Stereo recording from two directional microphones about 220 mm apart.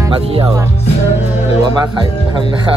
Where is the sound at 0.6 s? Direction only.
10° right (ahead or behind).